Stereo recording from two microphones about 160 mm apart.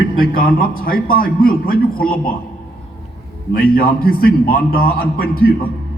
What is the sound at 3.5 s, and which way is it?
A man's voice, 70° left (ahead or behind).